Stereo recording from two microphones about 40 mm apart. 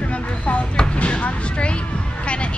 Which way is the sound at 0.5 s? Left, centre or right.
Left.